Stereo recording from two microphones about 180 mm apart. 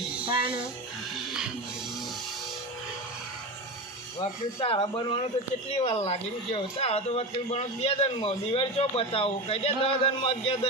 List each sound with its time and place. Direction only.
4.2 s speech: 30° left (ahead or behind)